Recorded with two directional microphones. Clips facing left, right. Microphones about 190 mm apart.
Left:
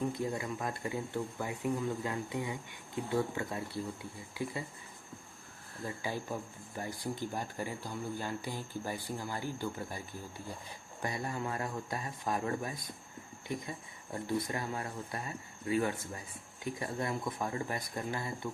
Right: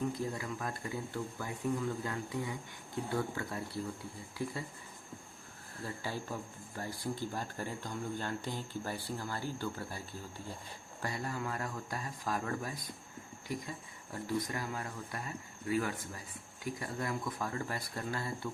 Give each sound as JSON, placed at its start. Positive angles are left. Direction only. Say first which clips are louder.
{"t": 0.1, "sound": "speech", "louder": "left 2 dB", "side_deg": 25}
{"t": 6.0, "sound": "speech", "louder": "left 2 dB", "side_deg": 15}